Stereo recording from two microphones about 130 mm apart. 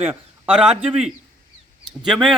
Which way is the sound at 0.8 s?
60° right (ahead or behind).